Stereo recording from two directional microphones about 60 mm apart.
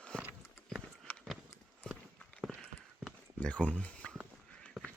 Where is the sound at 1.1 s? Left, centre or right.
Left.